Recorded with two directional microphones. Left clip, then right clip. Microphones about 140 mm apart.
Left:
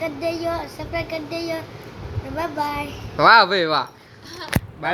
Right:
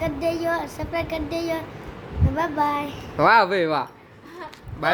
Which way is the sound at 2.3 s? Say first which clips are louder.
Right 2 dB; 20° right (ahead or behind).